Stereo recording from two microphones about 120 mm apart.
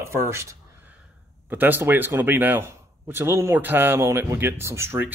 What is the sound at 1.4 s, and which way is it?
A man's voice, 15° right (ahead or behind).